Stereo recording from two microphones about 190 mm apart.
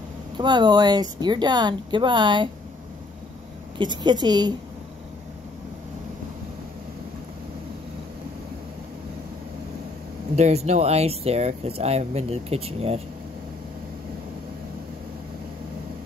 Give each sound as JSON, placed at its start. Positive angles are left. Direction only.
{"t": 0.4, "sound": "speech", "side_deg": -25}
{"t": 3.7, "sound": "speech", "side_deg": -25}
{"t": 10.3, "sound": "speech", "side_deg": -35}